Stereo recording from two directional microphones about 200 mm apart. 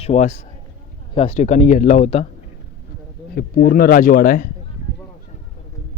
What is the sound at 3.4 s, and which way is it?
Speech, 50° left (ahead or behind).